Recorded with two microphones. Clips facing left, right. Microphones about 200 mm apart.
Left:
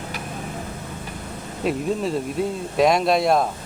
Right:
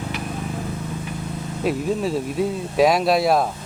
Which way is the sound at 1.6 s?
Centre (ahead or behind).